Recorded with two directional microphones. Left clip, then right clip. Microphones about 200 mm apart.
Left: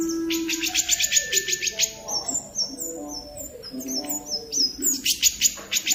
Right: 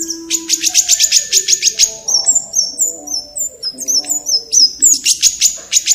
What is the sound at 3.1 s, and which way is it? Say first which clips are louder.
Bird: right 14 dB; 35° right (ahead or behind).